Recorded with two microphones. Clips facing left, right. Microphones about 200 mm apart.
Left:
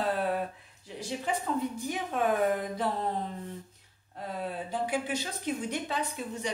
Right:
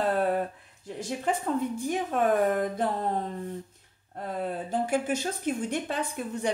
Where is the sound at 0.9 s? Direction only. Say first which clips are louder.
Right 3 dB; 50° right (ahead or behind).